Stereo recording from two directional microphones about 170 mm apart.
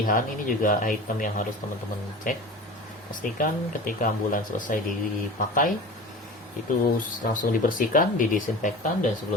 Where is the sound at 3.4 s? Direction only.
55° left (ahead or behind).